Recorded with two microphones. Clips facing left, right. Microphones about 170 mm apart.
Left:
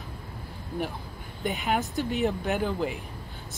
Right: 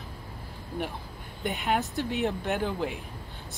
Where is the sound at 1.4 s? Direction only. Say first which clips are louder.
Left 1 dB; centre (ahead or behind).